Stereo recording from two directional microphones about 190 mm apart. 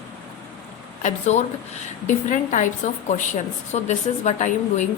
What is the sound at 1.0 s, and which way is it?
A woman's voice, 40° left (ahead or behind).